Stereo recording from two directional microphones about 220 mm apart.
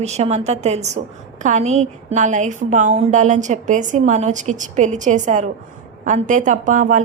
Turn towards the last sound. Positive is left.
turn(degrees=-35)  # may be behind; listen again after turning